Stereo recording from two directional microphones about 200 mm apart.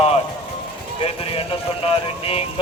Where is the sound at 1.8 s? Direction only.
30° left (ahead or behind).